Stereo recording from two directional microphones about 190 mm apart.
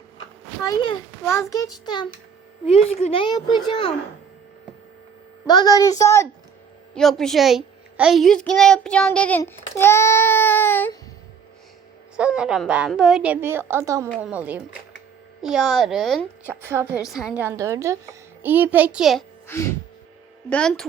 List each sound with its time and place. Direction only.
0.7 s a woman's voice: 25° left (ahead or behind)
2.6 s a woman's voice: 35° left (ahead or behind)
5.5 s a woman's voice: 20° left (ahead or behind)
6.9 s a woman's voice: centre (ahead or behind)
12.1 s a woman's voice: 5° right (ahead or behind)
16.5 s a woman's voice: 10° right (ahead or behind)
19.5 s a sound: 15° left (ahead or behind)
20.5 s a woman's voice: 5° left (ahead or behind)